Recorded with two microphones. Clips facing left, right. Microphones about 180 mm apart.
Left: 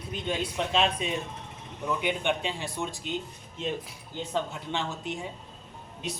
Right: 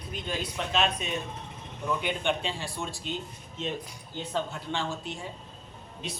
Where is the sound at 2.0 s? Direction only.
15° left (ahead or behind).